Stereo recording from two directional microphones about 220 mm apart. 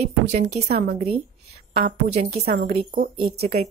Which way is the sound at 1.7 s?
25° right (ahead or behind).